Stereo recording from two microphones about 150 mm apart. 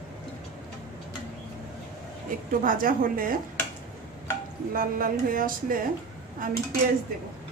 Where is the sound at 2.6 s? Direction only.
70° right (ahead or behind).